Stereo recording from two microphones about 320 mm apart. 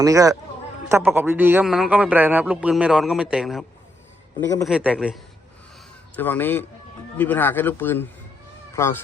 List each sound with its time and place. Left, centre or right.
0.0 s a man's voice: centre
4.7 s a man's voice: centre